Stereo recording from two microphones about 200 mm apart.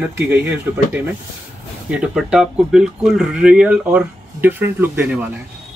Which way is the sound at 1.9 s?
5° right (ahead or behind).